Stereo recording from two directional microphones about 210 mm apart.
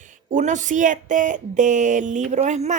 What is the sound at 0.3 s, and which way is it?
Speech, 35° right (ahead or behind).